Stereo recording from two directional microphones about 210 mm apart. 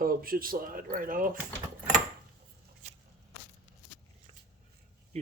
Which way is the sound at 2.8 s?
35° right (ahead or behind).